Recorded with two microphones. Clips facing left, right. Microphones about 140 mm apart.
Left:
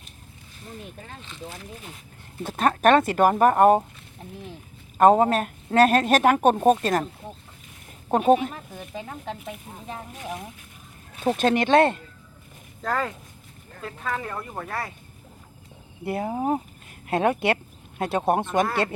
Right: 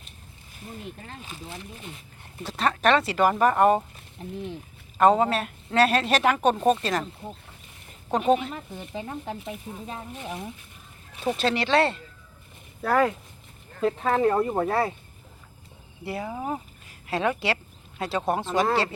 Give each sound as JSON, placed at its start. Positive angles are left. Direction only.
{"t": 2.4, "sound": "speech", "side_deg": 50}
{"t": 4.9, "sound": "speech", "side_deg": 45}
{"t": 8.1, "sound": "speech", "side_deg": 45}
{"t": 8.7, "sound": "speech", "side_deg": 0}
{"t": 11.2, "sound": "speech", "side_deg": 50}
{"t": 12.8, "sound": "speech", "side_deg": -10}
{"t": 13.8, "sound": "speech", "side_deg": -30}
{"t": 16.0, "sound": "speech", "side_deg": 50}